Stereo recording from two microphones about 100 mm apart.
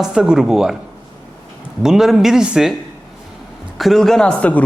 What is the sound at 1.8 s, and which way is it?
Speech, 5° right (ahead or behind).